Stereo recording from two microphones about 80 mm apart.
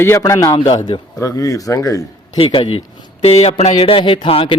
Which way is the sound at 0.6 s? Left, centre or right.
Left.